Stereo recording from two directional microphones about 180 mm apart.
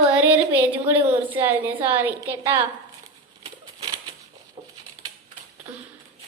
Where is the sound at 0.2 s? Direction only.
10° right (ahead or behind).